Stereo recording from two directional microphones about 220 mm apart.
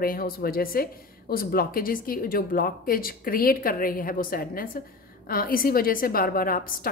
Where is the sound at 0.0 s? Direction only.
40° left (ahead or behind).